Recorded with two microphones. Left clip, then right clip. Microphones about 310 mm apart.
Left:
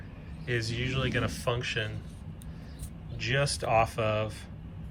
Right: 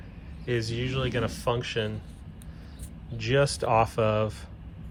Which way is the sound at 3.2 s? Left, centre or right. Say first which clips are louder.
Right 5 dB; centre.